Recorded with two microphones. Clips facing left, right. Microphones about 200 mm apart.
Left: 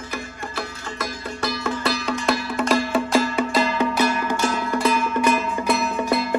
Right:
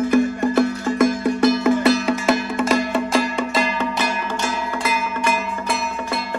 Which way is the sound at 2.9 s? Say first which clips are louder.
Even; 5° left (ahead or behind).